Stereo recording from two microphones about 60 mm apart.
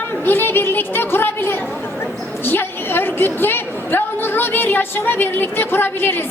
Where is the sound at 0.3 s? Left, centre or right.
Left.